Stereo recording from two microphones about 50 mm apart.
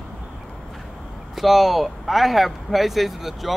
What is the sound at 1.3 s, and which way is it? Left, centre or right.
Speech, centre.